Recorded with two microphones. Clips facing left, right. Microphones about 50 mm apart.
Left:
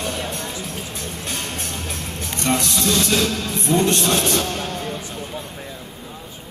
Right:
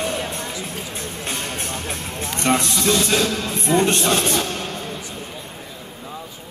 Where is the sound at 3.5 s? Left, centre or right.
Right.